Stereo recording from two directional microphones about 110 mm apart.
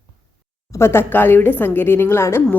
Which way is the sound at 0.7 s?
25° left (ahead or behind).